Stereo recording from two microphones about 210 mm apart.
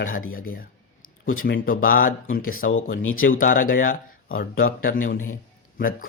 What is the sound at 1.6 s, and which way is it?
Speech, 40° left (ahead or behind).